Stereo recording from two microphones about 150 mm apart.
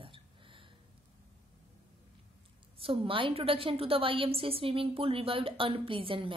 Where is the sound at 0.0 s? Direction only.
35° right (ahead or behind).